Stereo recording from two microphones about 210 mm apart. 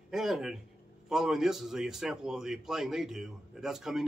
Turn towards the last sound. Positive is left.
turn(degrees=0)  # may be behind; listen again after turning